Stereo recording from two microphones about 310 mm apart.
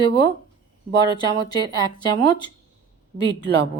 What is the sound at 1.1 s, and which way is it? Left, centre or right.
Speech, centre.